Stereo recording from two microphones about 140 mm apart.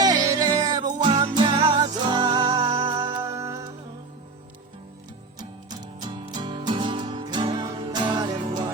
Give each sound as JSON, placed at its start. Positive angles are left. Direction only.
{"t": 0.0, "sound": "music", "side_deg": -25}
{"t": 6.0, "sound": "music", "side_deg": -35}